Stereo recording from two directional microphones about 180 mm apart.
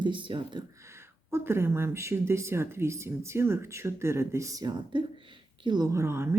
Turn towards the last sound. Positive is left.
turn(degrees=-15)  # may be behind; listen again after turning